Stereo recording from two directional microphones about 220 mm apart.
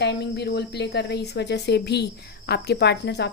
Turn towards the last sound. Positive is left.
turn(degrees=50)  # may be behind; listen again after turning